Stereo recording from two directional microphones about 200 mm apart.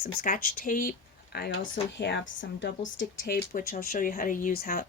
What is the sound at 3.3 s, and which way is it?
Speech, 45° left (ahead or behind).